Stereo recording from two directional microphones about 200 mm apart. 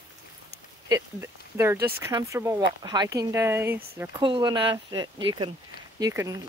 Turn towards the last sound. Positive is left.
turn(degrees=-15)  # may be behind; listen again after turning